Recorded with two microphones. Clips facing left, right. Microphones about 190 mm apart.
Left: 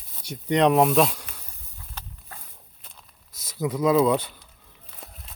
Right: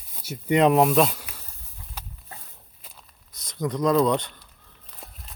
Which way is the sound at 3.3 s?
5° left (ahead or behind).